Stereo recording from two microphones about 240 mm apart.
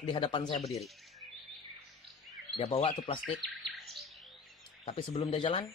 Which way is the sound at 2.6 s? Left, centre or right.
Left.